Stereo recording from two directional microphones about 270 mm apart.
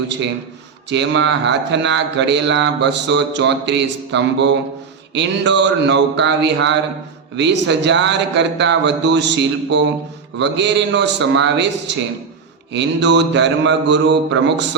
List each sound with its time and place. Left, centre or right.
0.9 s speech: right
12.7 s speech: right